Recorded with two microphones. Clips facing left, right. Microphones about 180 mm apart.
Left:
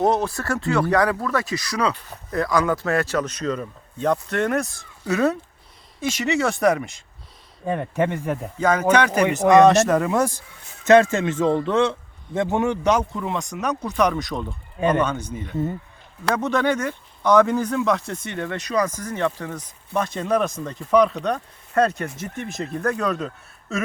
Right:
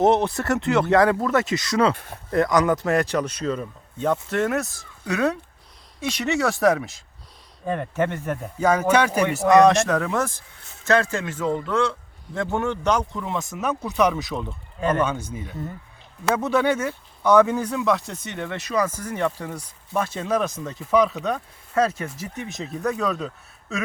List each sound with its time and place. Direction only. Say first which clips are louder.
0.0 s a man's voice: right 2 dB; 20° right (ahead or behind); by 7.0 s centre (ahead or behind)
7.7 s speech: left 2 dB; 10° left (ahead or behind)
8.5 s a man's voice: even; 10° right (ahead or behind)
9.6 s speech: left 2 dB; 5° left (ahead or behind)
14.8 s speech: left 2 dB; 15° left (ahead or behind)
15.0 s a man's voice: left 1 dB; 10° right (ahead or behind)